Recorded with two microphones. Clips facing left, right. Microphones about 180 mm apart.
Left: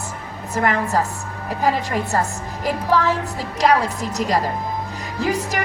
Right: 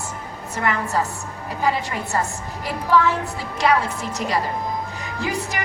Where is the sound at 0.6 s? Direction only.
40° left (ahead or behind).